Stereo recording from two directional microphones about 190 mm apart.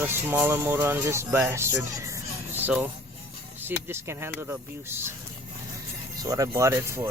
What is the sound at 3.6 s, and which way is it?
Speech, 15° right (ahead or behind).